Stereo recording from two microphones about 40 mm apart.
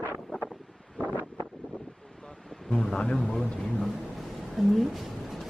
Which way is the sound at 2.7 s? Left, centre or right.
Centre.